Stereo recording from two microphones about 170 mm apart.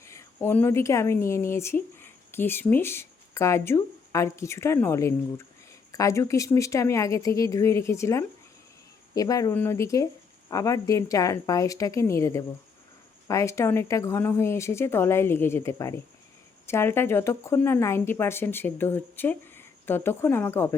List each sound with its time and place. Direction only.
0.0 s a woman's voice: 15° left (ahead or behind)